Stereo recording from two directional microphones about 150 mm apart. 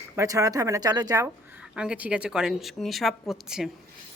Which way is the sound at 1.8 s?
10° right (ahead or behind).